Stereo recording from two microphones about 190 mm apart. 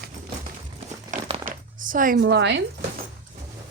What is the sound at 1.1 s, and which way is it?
Crumpling, 45° right (ahead or behind).